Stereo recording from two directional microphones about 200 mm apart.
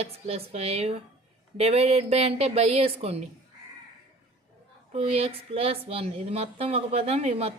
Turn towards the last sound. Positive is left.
turn(degrees=-30)  # may be behind; listen again after turning